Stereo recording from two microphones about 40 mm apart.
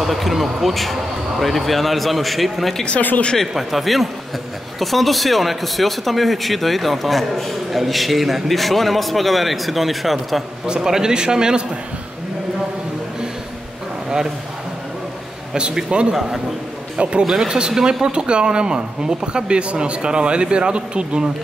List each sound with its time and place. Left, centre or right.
0.0 s speech: centre
10.7 s speech: centre
15.5 s speech: right
17.2 s speech: centre